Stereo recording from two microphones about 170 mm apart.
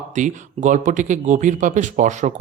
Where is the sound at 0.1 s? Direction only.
45° right (ahead or behind).